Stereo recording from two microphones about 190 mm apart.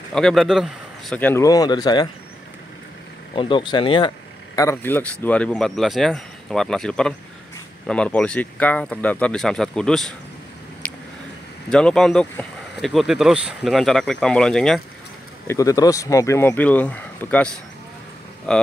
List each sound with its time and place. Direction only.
0.1 s speech: centre (ahead or behind); by 2.0 s 20° left (ahead or behind)
3.3 s speech: 25° left (ahead or behind)
4.6 s speech: 10° left (ahead or behind)
10.8 s a sound: 10° left (ahead or behind)
11.7 s speech: 5° left (ahead or behind)
15.4 s speech: 15° left (ahead or behind)